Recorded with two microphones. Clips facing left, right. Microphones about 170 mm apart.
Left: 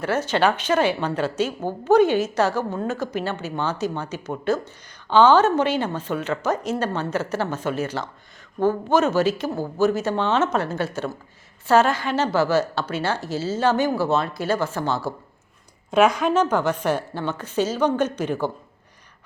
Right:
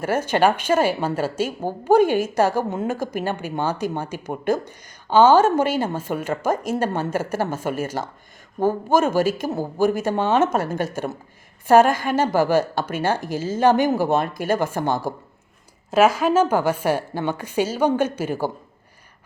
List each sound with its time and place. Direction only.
0.1 s a woman's voice: 10° right (ahead or behind)
15.9 s a woman's voice: 5° right (ahead or behind)